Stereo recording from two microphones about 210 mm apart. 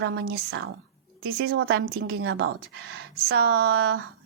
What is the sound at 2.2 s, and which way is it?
A woman's voice, 80° right.